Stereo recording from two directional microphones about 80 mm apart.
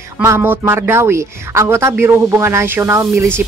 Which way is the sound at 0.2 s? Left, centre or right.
Right.